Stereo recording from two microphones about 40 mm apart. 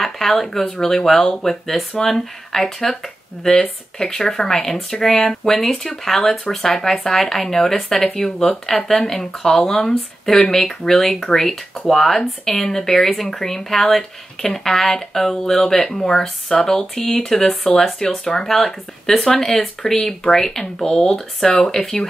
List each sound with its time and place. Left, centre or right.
0.0 s speech: centre
3.4 s speech: left